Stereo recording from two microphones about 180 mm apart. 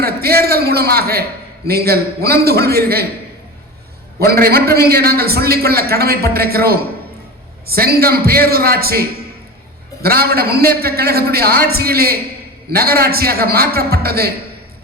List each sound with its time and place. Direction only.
0.0 s a sound: 60° right (ahead or behind)
1.6 s a man's voice: 60° right (ahead or behind)
4.2 s a man's voice: 60° right (ahead or behind)